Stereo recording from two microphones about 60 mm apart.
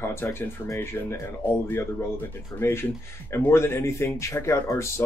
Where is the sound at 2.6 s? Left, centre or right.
Left.